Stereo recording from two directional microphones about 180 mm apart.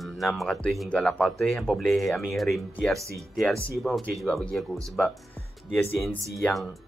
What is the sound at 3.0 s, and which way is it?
Speech, 15° right (ahead or behind).